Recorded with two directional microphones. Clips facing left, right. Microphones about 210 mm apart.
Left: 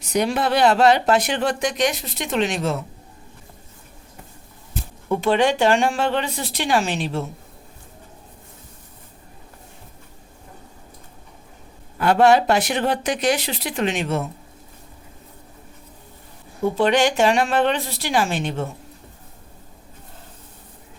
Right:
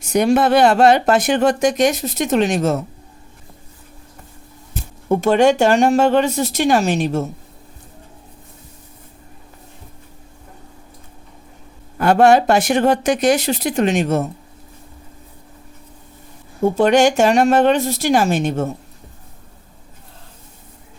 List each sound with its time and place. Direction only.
0.0 s speech: 50° right (ahead or behind)
5.0 s speech: 45° right (ahead or behind)
11.9 s speech: 45° right (ahead or behind)
16.6 s speech: 45° right (ahead or behind)